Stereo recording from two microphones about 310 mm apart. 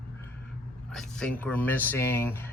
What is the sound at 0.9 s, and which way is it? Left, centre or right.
Speech, centre.